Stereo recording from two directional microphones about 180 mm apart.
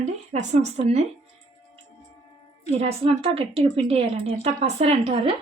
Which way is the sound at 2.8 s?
35° right (ahead or behind).